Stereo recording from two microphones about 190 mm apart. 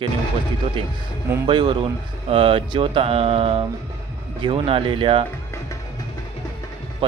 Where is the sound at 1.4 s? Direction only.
25° right (ahead or behind).